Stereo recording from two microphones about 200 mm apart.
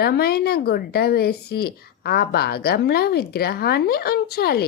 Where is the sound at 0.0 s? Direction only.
50° left (ahead or behind).